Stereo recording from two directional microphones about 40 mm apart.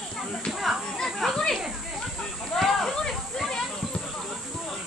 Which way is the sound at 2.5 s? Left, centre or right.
Centre.